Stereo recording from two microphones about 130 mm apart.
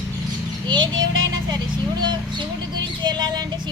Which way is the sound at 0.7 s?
35° right (ahead or behind).